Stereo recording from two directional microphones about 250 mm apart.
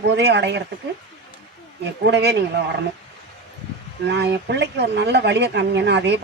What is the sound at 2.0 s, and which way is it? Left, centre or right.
Speech, right.